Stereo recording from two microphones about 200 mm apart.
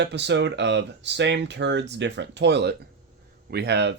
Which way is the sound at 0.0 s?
60° right (ahead or behind).